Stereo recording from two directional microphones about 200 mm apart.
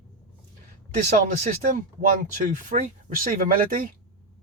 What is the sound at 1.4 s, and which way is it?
Speech, 40° right (ahead or behind).